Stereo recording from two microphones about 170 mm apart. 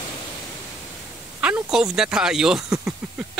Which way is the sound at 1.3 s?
5° right (ahead or behind).